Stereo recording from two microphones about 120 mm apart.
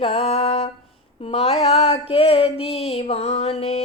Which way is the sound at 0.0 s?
60° left (ahead or behind).